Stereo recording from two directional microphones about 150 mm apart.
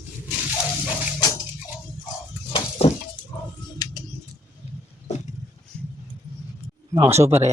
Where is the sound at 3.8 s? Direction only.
25° left (ahead or behind).